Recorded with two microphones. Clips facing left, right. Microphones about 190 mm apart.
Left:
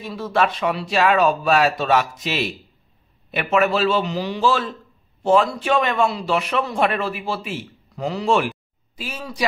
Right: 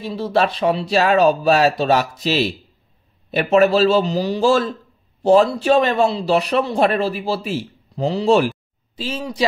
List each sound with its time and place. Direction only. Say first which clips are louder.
0.0 s a man's voice: right 2 dB; 30° right (ahead or behind)